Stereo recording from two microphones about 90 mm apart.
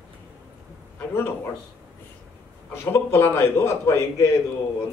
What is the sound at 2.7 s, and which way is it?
A man's voice, 30° left (ahead or behind).